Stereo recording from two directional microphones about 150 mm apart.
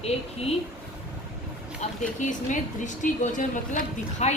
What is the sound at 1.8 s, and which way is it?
A woman's voice, 55° left (ahead or behind).